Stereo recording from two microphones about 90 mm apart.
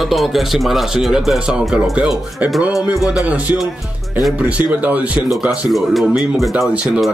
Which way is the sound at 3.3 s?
15° right (ahead or behind).